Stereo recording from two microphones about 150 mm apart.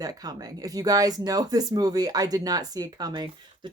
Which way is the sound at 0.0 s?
25° right (ahead or behind).